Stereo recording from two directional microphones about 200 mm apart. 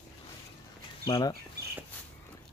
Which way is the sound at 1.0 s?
20° left (ahead or behind).